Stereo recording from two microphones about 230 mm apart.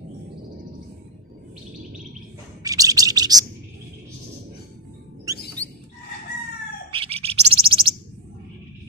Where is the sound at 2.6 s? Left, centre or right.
Centre.